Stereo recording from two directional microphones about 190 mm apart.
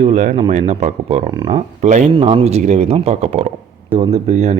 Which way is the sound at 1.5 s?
40° right (ahead or behind).